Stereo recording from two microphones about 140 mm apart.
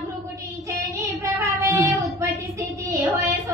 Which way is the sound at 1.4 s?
20° right (ahead or behind).